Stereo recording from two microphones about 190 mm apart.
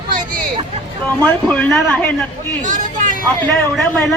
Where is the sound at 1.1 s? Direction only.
10° left (ahead or behind).